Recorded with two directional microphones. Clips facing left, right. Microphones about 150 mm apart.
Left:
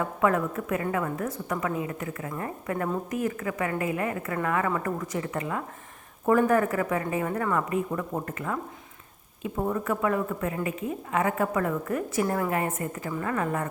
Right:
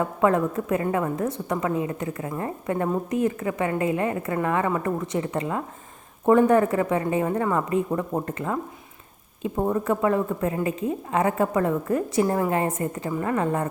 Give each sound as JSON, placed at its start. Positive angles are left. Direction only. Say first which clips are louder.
{"t": 0.0, "sound": "a woman's voice", "louder": "right 4 dB", "side_deg": -30}